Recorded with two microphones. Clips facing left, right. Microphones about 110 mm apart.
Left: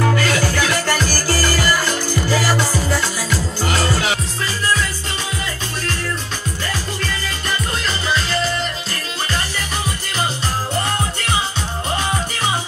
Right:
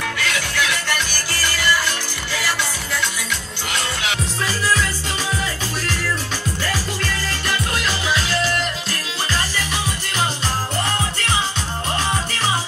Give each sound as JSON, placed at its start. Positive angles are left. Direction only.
{"t": 0.0, "sound": "music", "side_deg": 40}
{"t": 7.0, "sound": "music", "side_deg": -5}